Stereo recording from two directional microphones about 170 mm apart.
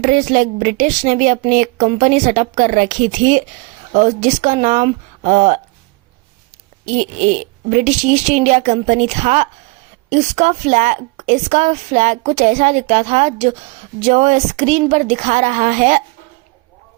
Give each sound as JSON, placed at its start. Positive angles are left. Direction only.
{"t": 0.0, "sound": "a woman's voice", "side_deg": -50}
{"t": 6.8, "sound": "a woman's voice", "side_deg": -45}